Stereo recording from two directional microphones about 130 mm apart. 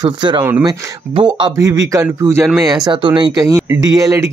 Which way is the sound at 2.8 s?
40° right (ahead or behind).